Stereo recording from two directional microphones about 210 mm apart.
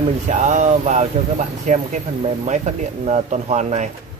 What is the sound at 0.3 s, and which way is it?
Speech, 35° right (ahead or behind).